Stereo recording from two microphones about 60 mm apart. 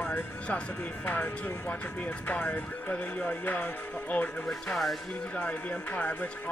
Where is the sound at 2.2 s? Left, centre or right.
Left.